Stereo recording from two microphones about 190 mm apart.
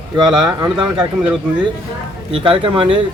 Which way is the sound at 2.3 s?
25° right (ahead or behind).